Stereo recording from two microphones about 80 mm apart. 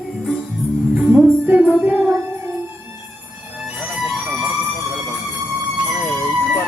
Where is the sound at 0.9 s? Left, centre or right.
Right.